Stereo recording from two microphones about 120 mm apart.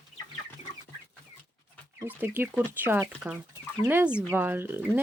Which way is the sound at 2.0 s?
15° right (ahead or behind).